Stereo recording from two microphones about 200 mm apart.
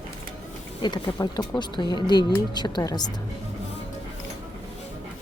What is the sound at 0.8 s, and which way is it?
Speech, 20° left (ahead or behind).